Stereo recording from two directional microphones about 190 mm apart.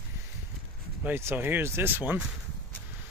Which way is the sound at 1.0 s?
10° right (ahead or behind).